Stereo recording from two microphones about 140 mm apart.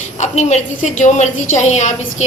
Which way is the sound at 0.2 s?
55° left (ahead or behind).